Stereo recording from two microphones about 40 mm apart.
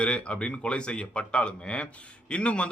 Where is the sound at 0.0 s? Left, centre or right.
Left.